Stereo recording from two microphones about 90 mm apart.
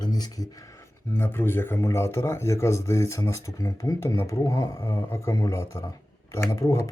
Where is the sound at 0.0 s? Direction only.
45° left (ahead or behind).